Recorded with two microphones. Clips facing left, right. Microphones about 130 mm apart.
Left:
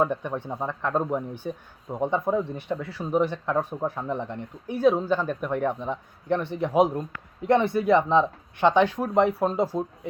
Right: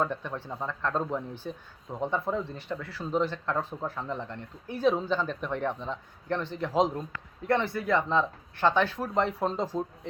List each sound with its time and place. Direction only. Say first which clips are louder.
0.0 s a man's voice: left 5 dB; 15° left (ahead or behind)